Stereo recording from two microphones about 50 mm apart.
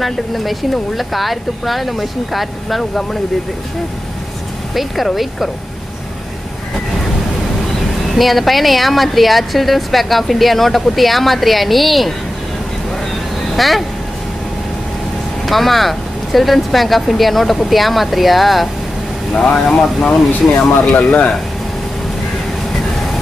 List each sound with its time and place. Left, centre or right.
0.0 s a woman's voice: centre
2.8 s speech: centre
4.7 s a woman's voice: centre
8.2 s a woman's voice: centre
13.6 s a woman's voice: centre
15.4 s a woman's voice: centre
19.3 s speech: centre
20.9 s speech: left